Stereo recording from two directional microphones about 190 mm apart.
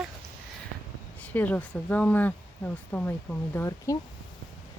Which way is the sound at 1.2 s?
10° left (ahead or behind).